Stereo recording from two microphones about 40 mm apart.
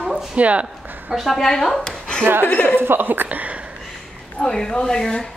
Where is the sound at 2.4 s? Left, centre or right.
Left.